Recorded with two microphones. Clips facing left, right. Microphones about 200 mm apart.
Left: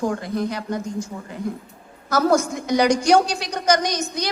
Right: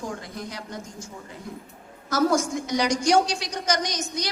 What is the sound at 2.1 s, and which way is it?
A woman's voice, 60° left (ahead or behind).